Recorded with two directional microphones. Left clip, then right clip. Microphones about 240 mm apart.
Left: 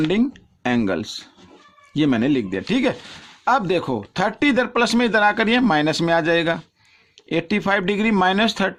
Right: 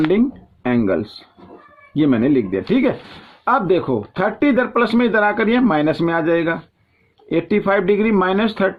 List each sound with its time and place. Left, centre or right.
0.1 s speech: left